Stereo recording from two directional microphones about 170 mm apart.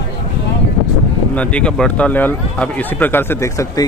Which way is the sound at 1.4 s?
5° left (ahead or behind).